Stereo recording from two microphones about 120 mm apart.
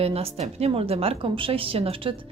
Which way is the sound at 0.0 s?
55° right (ahead or behind).